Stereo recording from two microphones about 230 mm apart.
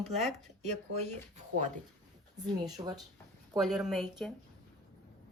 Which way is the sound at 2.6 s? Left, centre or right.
Centre.